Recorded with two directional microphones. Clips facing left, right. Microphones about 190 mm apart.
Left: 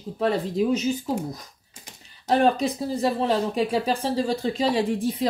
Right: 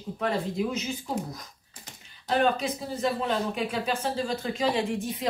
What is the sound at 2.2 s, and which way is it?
Speech, 45° left (ahead or behind).